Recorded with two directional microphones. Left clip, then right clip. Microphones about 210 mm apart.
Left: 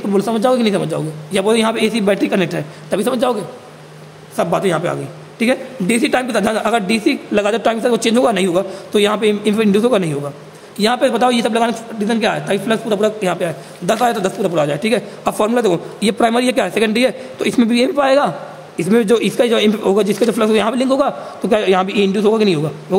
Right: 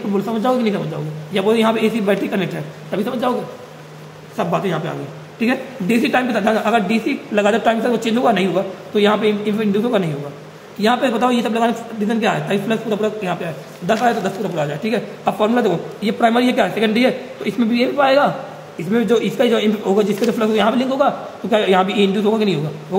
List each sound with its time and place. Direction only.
0.1 s a man's voice: 50° left (ahead or behind)
4.4 s a man's voice: 50° left (ahead or behind)